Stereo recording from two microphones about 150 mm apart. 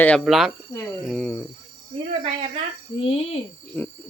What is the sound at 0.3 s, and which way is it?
Speech, centre (ahead or behind).